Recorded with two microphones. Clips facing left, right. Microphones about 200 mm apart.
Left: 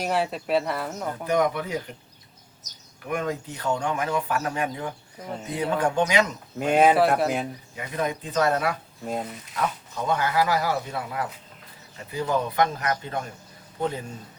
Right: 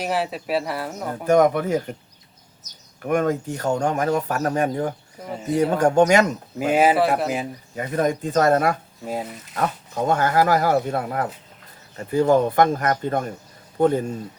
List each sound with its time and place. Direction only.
0.0 s speech: centre (ahead or behind)
1.3 s speech: 45° right (ahead or behind)
3.0 s speech: 50° right (ahead or behind)
6.6 s speech: 5° right (ahead or behind)
7.8 s a man's voice: 45° right (ahead or behind)